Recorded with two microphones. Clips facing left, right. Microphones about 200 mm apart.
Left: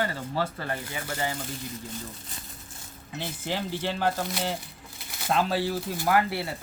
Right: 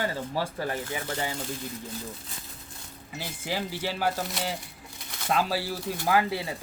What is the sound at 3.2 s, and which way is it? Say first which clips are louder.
Speech: left 1 dB; 5° right (ahead or behind).